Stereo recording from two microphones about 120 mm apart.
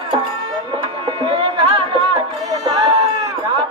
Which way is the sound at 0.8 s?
45° right (ahead or behind).